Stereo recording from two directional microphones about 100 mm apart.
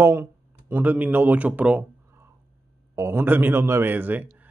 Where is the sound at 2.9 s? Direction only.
25° right (ahead or behind).